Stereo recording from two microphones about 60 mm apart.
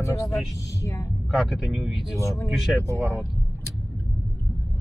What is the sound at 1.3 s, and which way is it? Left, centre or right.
Speech, centre.